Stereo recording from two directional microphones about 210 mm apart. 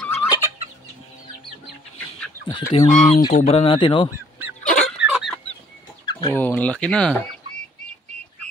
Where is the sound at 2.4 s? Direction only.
20° left (ahead or behind).